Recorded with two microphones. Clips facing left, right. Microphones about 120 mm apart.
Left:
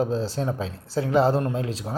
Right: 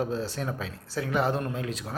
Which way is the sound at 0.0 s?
30° left (ahead or behind).